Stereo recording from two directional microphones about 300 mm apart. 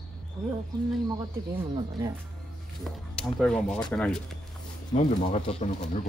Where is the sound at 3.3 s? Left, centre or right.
Centre.